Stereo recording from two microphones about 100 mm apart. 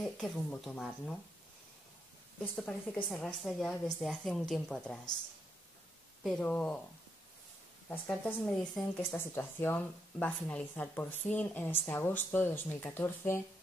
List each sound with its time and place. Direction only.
0.0 s a woman's voice: 10° left (ahead or behind)
2.5 s a woman's voice: 15° left (ahead or behind)
6.4 s a woman's voice: 15° left (ahead or behind)
7.9 s a woman's voice: 20° left (ahead or behind)
8.8 s speech: 5° left (ahead or behind)
9.1 s speech: 25° left (ahead or behind)